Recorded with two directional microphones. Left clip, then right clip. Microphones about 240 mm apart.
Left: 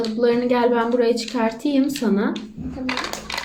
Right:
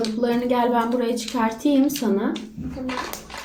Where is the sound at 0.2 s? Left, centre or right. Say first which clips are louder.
Left 4 dB; left.